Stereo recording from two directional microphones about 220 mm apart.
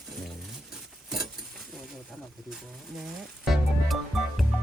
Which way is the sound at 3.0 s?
Centre (ahead or behind).